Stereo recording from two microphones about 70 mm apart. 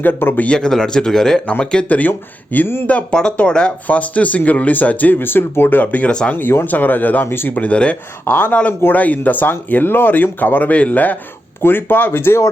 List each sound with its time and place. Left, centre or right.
0.0 s speech: left
0.4 s speech: centre; by 2.8 s left
2.8 s speech: centre
6.3 s speech: left